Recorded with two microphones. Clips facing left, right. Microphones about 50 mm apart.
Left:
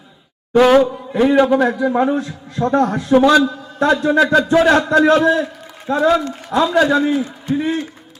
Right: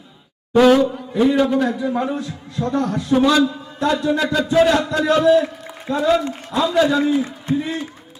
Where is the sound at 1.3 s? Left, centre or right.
Left.